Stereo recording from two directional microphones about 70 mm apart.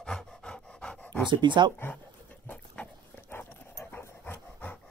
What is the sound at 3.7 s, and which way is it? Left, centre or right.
Dog, left.